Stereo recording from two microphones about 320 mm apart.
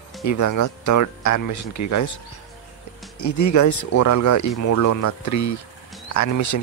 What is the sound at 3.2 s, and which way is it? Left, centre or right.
Speech, left.